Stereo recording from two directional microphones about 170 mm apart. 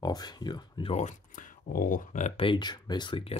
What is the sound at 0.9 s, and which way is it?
Speech, 45° left (ahead or behind).